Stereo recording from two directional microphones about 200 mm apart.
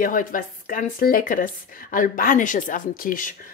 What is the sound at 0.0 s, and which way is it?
Speech, 40° left (ahead or behind).